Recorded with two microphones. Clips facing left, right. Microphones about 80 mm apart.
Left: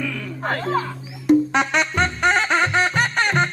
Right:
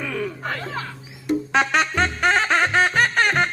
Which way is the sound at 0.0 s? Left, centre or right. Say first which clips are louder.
Right 1 dB; right.